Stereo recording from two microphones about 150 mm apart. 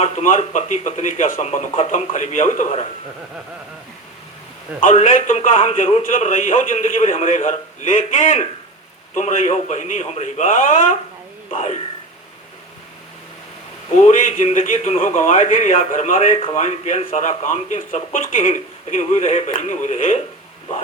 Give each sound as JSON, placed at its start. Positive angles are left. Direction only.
{"t": 0.0, "sound": "a man's voice", "side_deg": 50}
{"t": 4.8, "sound": "a man's voice", "side_deg": 60}
{"t": 7.0, "sound": "a man's voice", "side_deg": 45}
{"t": 11.5, "sound": "a man's voice", "side_deg": 50}
{"t": 13.9, "sound": "a man's voice", "side_deg": 50}
{"t": 16.1, "sound": "a man's voice", "side_deg": 40}